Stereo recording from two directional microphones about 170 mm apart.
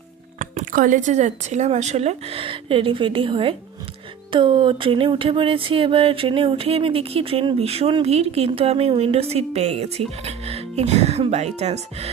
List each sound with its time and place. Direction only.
0.3 s speech: 50° right (ahead or behind)